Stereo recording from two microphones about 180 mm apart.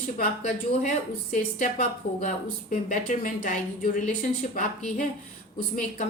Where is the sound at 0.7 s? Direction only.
40° left (ahead or behind).